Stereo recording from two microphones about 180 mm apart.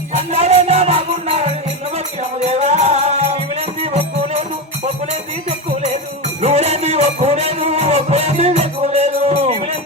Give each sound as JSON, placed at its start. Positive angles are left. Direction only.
{"t": 0.1, "sound": "music", "side_deg": -35}
{"t": 5.5, "sound": "music", "side_deg": -40}